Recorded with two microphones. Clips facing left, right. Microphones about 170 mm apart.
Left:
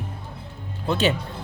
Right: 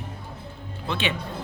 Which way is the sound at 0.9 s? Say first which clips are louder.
Left 6 dB; 40° left (ahead or behind).